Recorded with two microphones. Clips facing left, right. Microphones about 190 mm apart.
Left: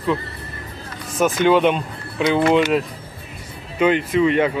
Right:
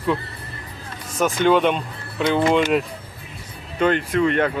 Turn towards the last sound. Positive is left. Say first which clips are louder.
# left 2 dB
turn(degrees=5)  # may be behind; listen again after turning